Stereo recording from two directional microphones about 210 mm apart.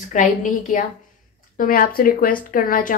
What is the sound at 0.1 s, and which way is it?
A woman's voice, 35° left (ahead or behind).